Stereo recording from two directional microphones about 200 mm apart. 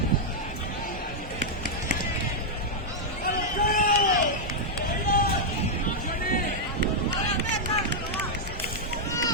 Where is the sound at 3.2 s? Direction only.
45° left (ahead or behind).